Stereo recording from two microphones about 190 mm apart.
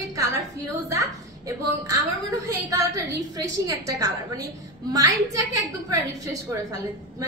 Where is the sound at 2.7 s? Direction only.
20° right (ahead or behind).